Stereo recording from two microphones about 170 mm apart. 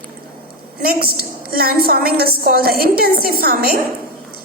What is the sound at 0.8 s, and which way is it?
A woman's voice, 60° right (ahead or behind).